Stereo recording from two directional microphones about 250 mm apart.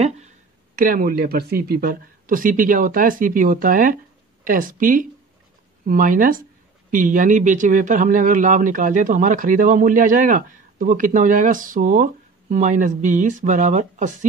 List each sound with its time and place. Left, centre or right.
0.7 s a man's voice: right